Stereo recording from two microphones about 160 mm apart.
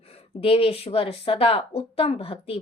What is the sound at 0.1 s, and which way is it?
A woman's voice, 40° left (ahead or behind).